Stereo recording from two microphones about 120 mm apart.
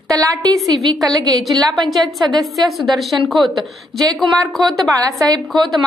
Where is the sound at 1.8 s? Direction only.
Centre (ahead or behind).